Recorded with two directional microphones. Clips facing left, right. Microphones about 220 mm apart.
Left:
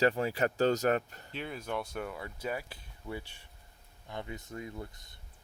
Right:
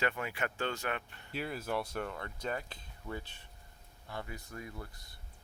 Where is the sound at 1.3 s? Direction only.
5° right (ahead or behind); by 5.1 s 20° left (ahead or behind).